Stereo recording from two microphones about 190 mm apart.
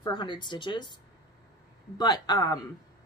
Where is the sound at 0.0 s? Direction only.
25° left (ahead or behind).